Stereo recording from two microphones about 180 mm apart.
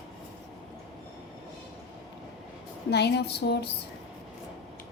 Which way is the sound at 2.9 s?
65° left (ahead or behind).